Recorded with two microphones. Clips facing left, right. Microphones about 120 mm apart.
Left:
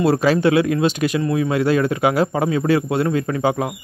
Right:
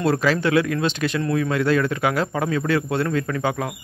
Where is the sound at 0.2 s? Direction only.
20° left (ahead or behind).